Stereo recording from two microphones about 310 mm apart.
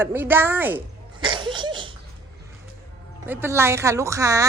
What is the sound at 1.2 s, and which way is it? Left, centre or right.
Laughter, centre.